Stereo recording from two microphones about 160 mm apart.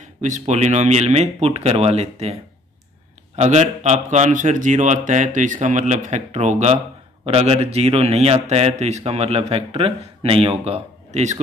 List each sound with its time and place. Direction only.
0.0 s speech: 50° right (ahead or behind)
3.3 s a man's voice: 45° right (ahead or behind)